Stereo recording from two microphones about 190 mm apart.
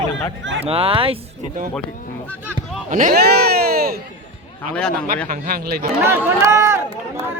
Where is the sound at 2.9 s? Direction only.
50° right (ahead or behind).